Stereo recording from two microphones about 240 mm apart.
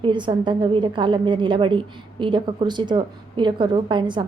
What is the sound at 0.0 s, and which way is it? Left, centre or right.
A woman's voice, centre.